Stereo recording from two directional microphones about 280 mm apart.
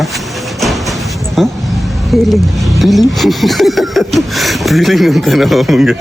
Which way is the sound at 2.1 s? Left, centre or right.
Centre.